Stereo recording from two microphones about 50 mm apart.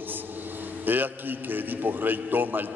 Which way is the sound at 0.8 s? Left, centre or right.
Right.